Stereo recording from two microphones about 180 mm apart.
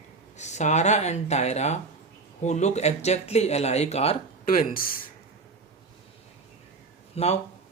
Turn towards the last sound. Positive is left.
turn(degrees=35)  # may be behind; listen again after turning